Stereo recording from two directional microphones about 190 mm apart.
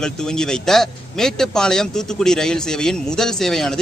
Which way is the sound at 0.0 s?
5° left (ahead or behind).